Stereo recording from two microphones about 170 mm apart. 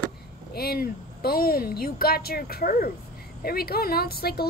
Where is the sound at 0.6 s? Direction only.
65° left (ahead or behind).